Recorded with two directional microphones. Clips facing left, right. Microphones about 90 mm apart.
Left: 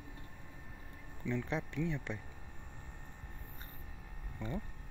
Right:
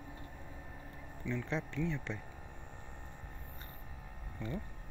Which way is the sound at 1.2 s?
25° left (ahead or behind).